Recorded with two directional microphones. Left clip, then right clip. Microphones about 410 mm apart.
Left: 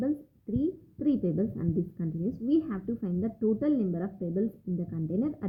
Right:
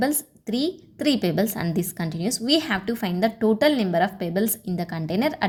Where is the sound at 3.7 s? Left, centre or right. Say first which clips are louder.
Right 9 dB; right.